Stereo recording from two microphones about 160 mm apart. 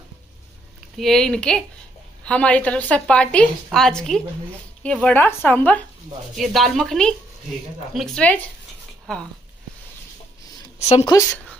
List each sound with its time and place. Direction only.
0.9 s a woman's voice: centre (ahead or behind)
10.8 s speech: 45° left (ahead or behind)